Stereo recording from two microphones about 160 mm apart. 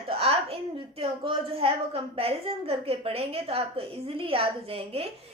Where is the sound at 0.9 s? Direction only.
35° right (ahead or behind).